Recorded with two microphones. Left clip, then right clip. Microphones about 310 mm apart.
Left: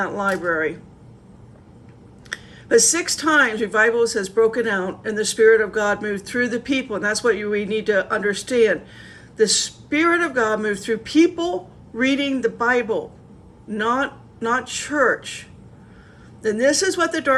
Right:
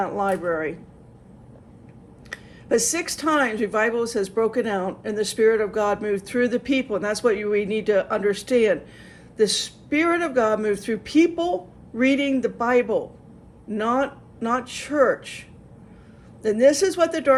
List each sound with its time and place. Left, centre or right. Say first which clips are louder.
0.3 s speech: left 2 dB; right
2.3 s speech: left 5 dB; centre